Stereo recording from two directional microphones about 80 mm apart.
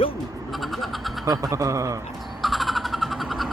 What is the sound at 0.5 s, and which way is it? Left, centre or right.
Vehicle, centre.